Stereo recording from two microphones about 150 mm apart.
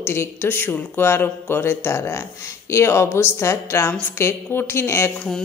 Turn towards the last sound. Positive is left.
turn(degrees=15)  # may be behind; listen again after turning